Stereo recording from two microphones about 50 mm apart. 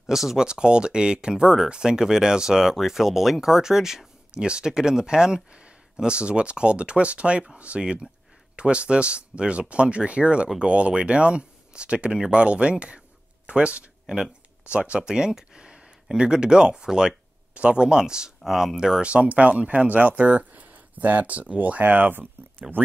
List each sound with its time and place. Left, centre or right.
0.0 s speech: centre
0.5 s speech: centre
18.9 s speech: right